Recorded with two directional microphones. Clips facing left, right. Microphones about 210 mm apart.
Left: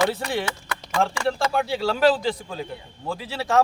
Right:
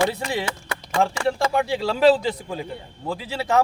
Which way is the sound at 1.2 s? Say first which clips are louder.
Right 2 dB; 15° right (ahead or behind).